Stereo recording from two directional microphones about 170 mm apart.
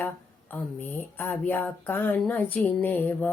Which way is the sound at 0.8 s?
10° left (ahead or behind).